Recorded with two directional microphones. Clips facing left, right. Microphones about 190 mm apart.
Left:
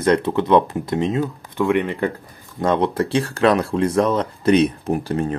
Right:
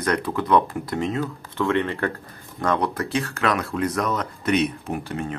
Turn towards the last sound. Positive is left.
turn(degrees=35)  # may be behind; listen again after turning